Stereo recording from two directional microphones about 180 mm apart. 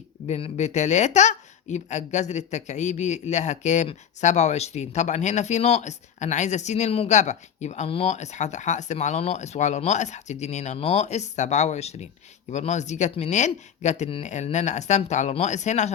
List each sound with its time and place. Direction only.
0.3 s speech: 35° left (ahead or behind)